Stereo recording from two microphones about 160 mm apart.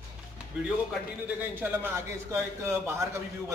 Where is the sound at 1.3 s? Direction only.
10° right (ahead or behind).